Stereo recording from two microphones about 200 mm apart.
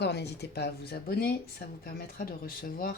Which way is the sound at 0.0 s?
55° left (ahead or behind).